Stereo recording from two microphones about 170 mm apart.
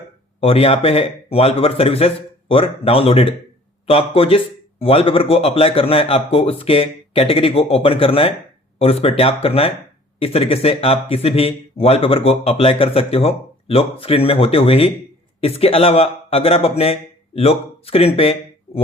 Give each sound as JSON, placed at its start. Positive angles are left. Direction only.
{"t": 0.3, "sound": "a man's voice", "side_deg": 35}